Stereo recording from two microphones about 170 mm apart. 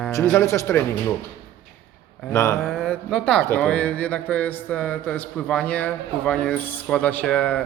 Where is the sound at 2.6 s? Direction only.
Centre (ahead or behind).